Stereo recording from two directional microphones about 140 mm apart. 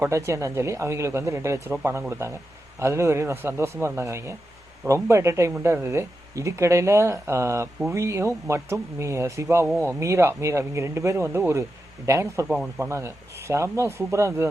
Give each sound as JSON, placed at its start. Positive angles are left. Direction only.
{"t": 0.0, "sound": "speech", "side_deg": -20}
{"t": 12.5, "sound": "speech", "side_deg": -5}
{"t": 12.8, "sound": "speech", "side_deg": -20}